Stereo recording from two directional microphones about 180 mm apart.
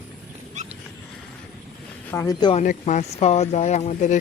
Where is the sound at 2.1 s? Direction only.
15° left (ahead or behind).